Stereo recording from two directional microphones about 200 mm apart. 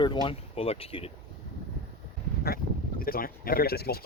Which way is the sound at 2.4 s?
45° left (ahead or behind).